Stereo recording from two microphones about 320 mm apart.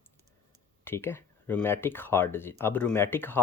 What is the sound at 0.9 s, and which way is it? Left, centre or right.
A man's voice, centre.